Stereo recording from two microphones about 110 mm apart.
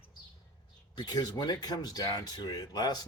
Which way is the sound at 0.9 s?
40° left (ahead or behind).